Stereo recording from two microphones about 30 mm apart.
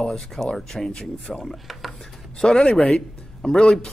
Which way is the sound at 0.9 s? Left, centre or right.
Left.